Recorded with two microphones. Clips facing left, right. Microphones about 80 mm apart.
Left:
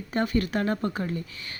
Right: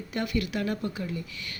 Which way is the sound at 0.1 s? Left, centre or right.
Left.